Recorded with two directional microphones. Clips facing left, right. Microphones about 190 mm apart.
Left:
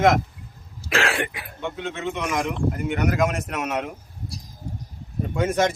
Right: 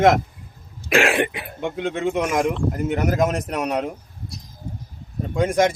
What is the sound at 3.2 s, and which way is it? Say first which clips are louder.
Speech: right 3 dB; 35° right (ahead or behind).